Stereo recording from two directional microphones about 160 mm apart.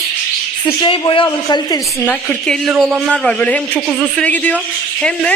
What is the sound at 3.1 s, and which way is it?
A man's voice, 5° left (ahead or behind).